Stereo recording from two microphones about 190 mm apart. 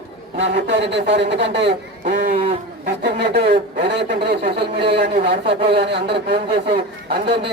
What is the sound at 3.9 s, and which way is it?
Speech, 60° right (ahead or behind).